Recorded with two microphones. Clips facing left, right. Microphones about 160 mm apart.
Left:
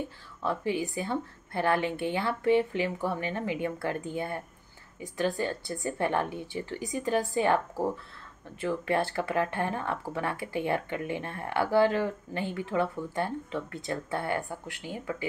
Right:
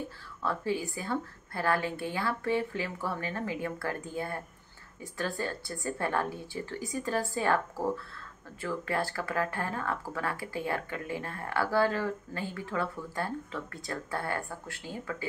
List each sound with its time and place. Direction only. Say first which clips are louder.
0.4 s speech: left 2 dB; 20° left (ahead or behind)